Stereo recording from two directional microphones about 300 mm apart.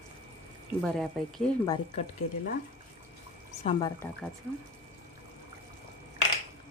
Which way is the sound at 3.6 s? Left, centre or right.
Centre.